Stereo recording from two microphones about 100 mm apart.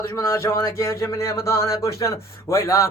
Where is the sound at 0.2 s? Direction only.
25° left (ahead or behind).